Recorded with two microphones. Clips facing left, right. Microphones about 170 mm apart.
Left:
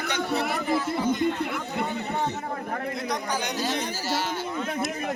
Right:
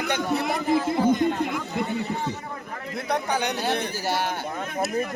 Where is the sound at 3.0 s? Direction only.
60° right (ahead or behind).